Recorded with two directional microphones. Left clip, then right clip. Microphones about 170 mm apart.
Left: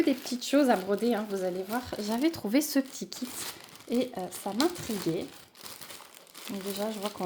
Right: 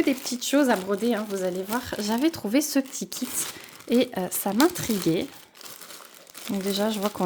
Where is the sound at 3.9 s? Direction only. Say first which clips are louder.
Right 7 dB; 50° right (ahead or behind).